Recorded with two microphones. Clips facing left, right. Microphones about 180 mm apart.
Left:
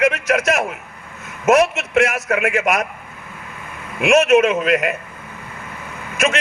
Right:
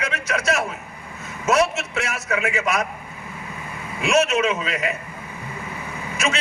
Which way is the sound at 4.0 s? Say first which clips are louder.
Left 6 dB; 55° left (ahead or behind).